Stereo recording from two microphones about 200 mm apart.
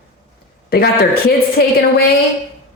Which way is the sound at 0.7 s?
50° left (ahead or behind).